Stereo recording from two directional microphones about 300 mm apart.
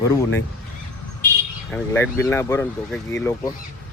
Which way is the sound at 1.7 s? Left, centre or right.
Centre.